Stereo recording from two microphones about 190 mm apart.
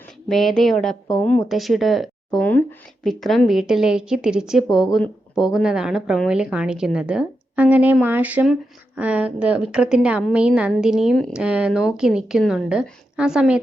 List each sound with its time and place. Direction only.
0.3 s a woman's voice: centre (ahead or behind)